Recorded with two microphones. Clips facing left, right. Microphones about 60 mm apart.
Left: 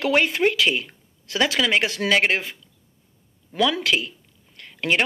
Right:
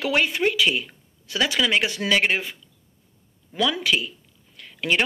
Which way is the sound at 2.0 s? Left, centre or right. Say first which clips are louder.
Left 2 dB; left.